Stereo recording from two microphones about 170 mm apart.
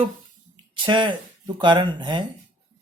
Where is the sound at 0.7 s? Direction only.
30° right (ahead or behind).